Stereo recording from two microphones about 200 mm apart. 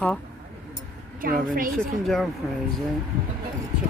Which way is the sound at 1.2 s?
45° right (ahead or behind).